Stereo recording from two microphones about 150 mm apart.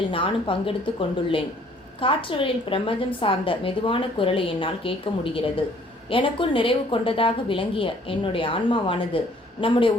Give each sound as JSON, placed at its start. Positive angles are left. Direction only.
{"t": 0.1, "sound": "a woman's voice", "side_deg": 35}